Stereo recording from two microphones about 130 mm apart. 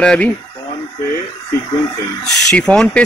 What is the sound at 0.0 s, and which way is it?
Speech, 5° left (ahead or behind).